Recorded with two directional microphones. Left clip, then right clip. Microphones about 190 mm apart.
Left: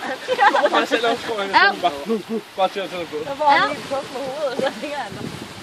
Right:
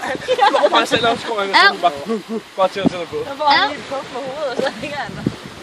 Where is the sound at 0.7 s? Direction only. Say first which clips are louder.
Right 3 dB; 30° right (ahead or behind).